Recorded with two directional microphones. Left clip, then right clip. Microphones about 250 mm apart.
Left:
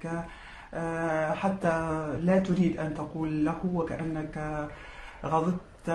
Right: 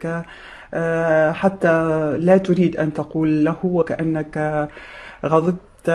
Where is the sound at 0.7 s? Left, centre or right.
Right.